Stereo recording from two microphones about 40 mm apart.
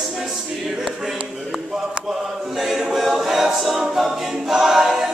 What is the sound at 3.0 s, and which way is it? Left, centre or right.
A capella, centre.